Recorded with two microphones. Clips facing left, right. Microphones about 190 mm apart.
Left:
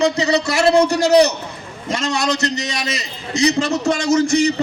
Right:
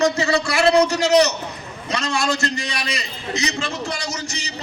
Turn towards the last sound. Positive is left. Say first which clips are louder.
# left 16 dB
turn(degrees=50)  # may be behind; listen again after turning